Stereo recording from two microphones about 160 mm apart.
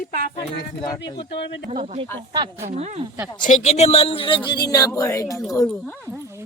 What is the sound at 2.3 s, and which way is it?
Speech, 30° right (ahead or behind).